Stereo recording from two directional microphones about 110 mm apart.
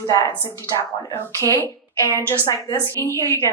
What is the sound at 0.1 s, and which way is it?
Speech, 30° left (ahead or behind).